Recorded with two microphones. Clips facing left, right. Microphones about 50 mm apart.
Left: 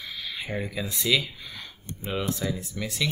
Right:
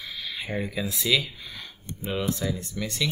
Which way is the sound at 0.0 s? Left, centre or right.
Centre.